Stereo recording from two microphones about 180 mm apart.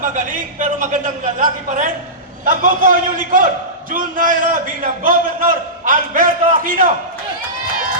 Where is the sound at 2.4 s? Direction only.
45° right (ahead or behind).